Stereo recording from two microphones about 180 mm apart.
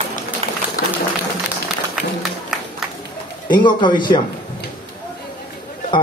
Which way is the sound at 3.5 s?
25° left (ahead or behind).